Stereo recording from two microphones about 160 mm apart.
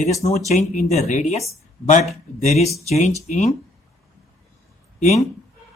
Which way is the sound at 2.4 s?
45° left (ahead or behind).